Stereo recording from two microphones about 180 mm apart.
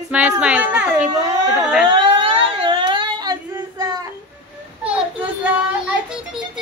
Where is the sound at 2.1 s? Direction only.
30° right (ahead or behind).